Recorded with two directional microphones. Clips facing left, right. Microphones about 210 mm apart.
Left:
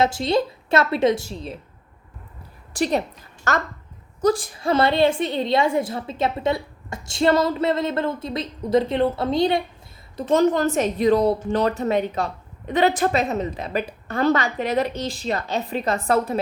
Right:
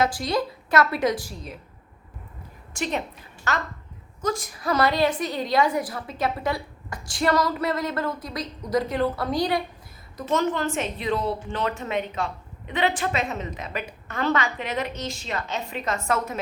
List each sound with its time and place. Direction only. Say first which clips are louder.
0.0 s a woman's voice: left 4 dB; 25° left (ahead or behind)
2.7 s a woman's voice: left 6 dB; 35° left (ahead or behind)
4.2 s a woman's voice: left 7 dB; 35° left (ahead or behind)